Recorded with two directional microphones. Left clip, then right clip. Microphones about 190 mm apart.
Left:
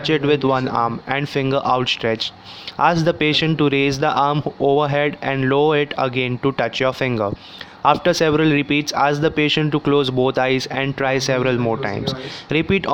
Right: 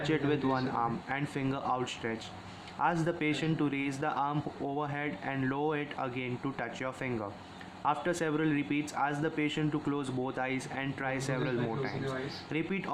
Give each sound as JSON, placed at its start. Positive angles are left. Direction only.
{"t": 0.1, "sound": "speech", "side_deg": 35}